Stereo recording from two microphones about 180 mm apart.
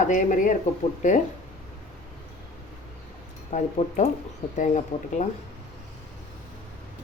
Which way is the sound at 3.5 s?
40° left (ahead or behind).